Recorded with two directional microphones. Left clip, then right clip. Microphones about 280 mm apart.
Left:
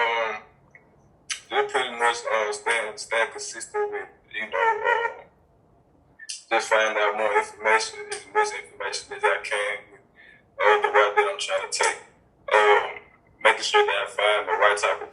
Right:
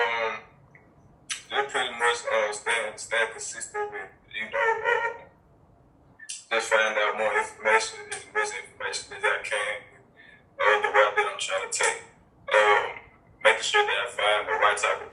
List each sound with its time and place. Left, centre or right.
0.0 s a sound: left
1.3 s speech: left
6.2 s speech: left